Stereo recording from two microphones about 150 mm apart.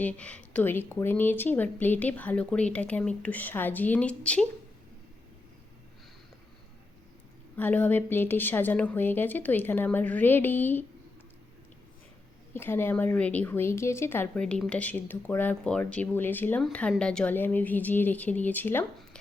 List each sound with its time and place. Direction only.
0.0 s speech: 10° left (ahead or behind)
7.5 s speech: 10° left (ahead or behind)
12.5 s speech: 15° left (ahead or behind)